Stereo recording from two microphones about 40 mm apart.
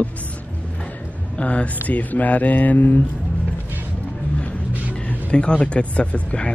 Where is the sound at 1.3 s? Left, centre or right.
Left.